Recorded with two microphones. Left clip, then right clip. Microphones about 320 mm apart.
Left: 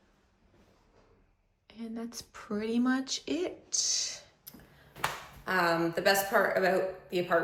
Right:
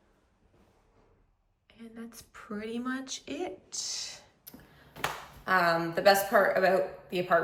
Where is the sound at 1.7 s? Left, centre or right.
Centre.